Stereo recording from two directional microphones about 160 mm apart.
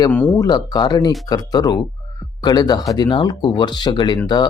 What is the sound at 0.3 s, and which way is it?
Speech, 25° left (ahead or behind).